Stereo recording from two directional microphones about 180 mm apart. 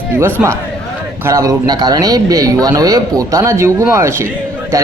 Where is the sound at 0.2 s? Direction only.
15° right (ahead or behind).